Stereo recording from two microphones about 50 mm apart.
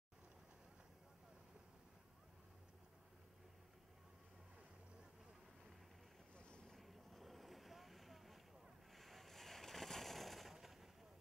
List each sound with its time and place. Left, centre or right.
6.3 s boat: left
6.7 s vehicle: centre
8.9 s a sound: centre